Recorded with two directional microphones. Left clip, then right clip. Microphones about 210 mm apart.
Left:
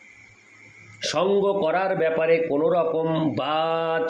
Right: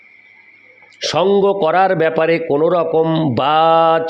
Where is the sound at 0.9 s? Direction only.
40° right (ahead or behind).